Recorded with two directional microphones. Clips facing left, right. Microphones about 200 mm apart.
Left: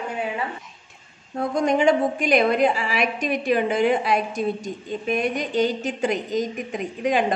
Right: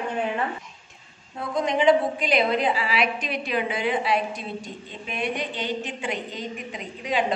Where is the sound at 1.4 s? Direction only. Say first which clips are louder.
Left 4 dB; 45° left (ahead or behind).